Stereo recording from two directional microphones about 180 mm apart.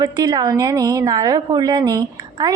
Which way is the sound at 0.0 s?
20° right (ahead or behind).